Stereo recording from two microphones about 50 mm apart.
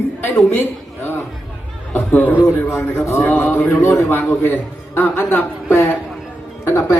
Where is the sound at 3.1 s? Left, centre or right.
Left.